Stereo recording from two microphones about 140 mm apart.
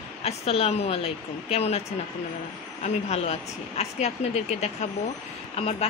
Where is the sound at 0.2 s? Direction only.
45° left (ahead or behind).